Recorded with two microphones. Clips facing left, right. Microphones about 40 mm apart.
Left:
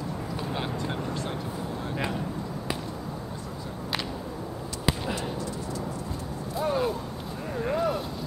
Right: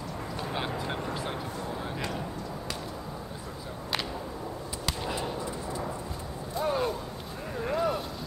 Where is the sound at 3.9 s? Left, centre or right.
Centre.